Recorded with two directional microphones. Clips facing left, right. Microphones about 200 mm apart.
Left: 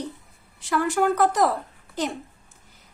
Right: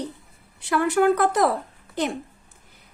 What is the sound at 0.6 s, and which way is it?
Speech, 60° right (ahead or behind).